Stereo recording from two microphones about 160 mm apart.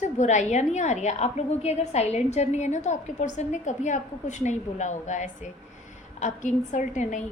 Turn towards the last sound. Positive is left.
turn(degrees=50)  # may be behind; listen again after turning